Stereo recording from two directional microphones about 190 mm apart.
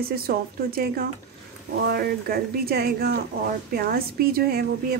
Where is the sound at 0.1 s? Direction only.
50° right (ahead or behind).